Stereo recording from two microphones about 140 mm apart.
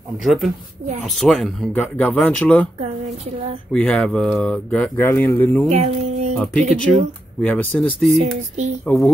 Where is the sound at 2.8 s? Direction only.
50° right (ahead or behind).